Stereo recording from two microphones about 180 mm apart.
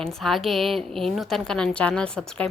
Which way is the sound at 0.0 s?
Centre (ahead or behind).